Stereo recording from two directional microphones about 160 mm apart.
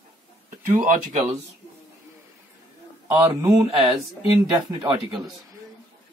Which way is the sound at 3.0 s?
15° right (ahead or behind).